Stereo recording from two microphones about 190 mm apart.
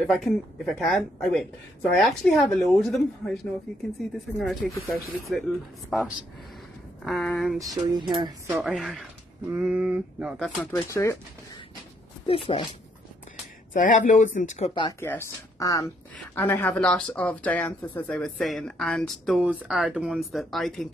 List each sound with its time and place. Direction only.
0.0 s speech: centre (ahead or behind)
4.4 s speech: centre (ahead or behind)
7.5 s a sound: 20° right (ahead or behind)
8.5 s speech: 10° right (ahead or behind)
8.7 s speech: centre (ahead or behind)
10.6 s speech: 10° left (ahead or behind)
12.3 s speech: 30° left (ahead or behind)
13.7 s speech: 40° left (ahead or behind)
14.7 s speech: 25° left (ahead or behind)
15.0 s speech: 15° left (ahead or behind)